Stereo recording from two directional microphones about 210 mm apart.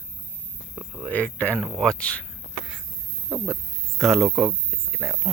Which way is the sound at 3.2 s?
10° right (ahead or behind).